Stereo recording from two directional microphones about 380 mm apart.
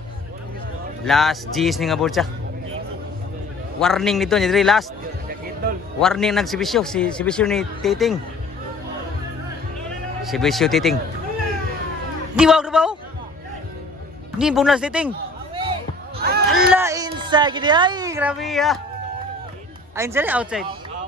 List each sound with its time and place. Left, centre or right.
1.0 s a man's voice: centre
3.8 s a man's voice: centre
5.9 s a man's voice: centre
10.2 s a man's voice: centre
12.4 s a man's voice: centre
14.4 s speech: centre
16.2 s a sound: right
16.7 s speech: centre
20.0 s a man's voice: centre